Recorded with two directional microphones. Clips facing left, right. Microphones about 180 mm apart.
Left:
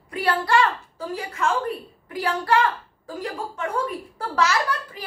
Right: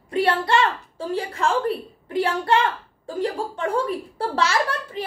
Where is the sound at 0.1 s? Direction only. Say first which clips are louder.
Right 2 dB; 25° right (ahead or behind).